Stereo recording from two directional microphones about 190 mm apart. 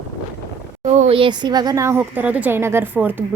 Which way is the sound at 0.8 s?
35° right (ahead or behind).